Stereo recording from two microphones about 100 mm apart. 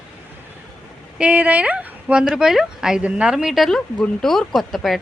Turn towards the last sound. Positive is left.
turn(degrees=0)  # may be behind; listen again after turning